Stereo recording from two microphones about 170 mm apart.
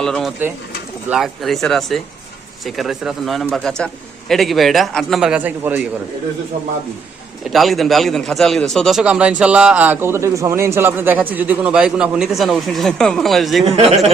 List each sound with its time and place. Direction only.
0.0 s a man's voice: centre (ahead or behind)
7.5 s a man's voice: centre (ahead or behind)
13.7 s speech: 35° right (ahead or behind)